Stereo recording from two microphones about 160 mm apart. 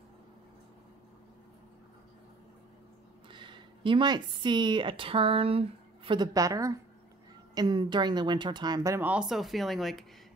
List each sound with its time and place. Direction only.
3.3 s speech: 30° right (ahead or behind); by 10.0 s centre (ahead or behind)